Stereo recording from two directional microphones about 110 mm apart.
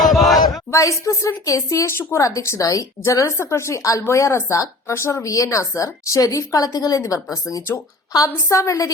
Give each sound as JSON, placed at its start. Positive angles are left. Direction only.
{"t": 0.0, "sound": "battle cry", "side_deg": 0}
{"t": 0.7, "sound": "a woman's voice", "side_deg": 30}
{"t": 8.4, "sound": "speech", "side_deg": 30}